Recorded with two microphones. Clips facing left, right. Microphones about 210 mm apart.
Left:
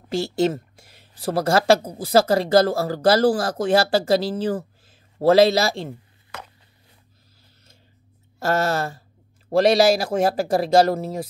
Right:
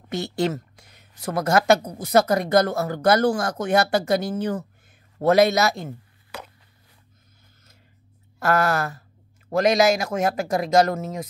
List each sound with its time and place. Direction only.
0.1 s speech: 30° left (ahead or behind)
8.4 s speech: 25° left (ahead or behind)